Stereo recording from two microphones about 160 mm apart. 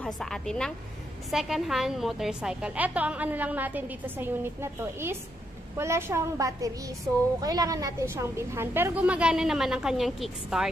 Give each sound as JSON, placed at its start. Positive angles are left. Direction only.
{"t": 0.0, "sound": "a woman's voice", "side_deg": 5}